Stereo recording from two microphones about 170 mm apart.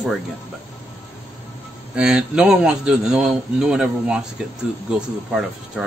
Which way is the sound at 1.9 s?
5° right (ahead or behind).